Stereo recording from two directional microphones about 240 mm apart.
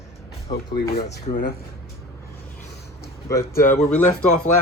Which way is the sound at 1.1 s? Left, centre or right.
Left.